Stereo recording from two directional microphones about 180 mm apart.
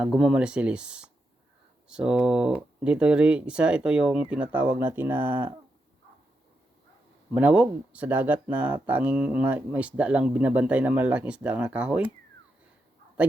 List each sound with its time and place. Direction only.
0.0 s speech: 5° right (ahead or behind)
7.3 s speech: 5° right (ahead or behind)